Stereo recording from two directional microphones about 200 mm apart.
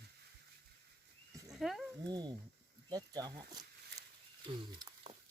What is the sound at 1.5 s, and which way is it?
Speech, centre (ahead or behind).